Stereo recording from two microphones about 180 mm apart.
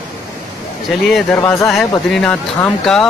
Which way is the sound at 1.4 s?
15° left (ahead or behind).